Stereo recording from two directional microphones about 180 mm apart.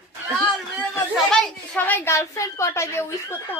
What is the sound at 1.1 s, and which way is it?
A woman's voice, 5° left (ahead or behind).